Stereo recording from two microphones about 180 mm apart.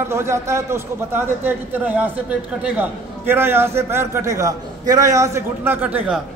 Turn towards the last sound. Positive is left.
turn(degrees=-5)  # may be behind; listen again after turning